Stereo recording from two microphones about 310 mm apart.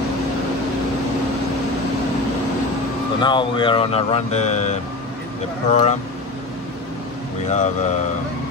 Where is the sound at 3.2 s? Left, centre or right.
Centre.